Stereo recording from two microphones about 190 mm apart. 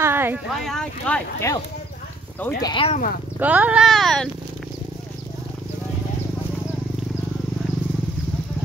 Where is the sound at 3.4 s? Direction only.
10° right (ahead or behind).